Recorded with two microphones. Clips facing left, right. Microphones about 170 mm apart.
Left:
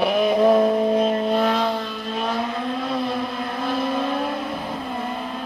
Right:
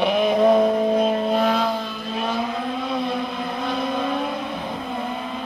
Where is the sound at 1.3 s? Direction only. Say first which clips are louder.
Even; centre (ahead or behind).